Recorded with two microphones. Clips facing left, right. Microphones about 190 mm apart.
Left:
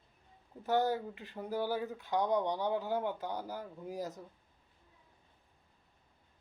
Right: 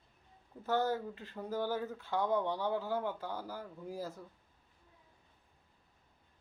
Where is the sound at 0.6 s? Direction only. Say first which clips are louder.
Left 2 dB; 15° left (ahead or behind).